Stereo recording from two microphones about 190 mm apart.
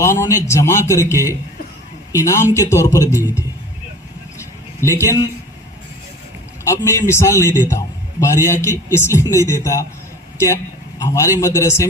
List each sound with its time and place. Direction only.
0.0 s a man's voice: 15° left (ahead or behind)
4.9 s a man's voice: 15° left (ahead or behind)
6.7 s a man's voice: 15° left (ahead or behind)